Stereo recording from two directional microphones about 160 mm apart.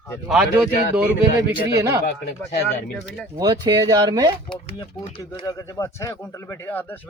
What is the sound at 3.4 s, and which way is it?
Speech, 25° right (ahead or behind).